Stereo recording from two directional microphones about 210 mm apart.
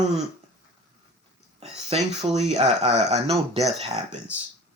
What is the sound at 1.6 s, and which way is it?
Speech, 30° right (ahead or behind).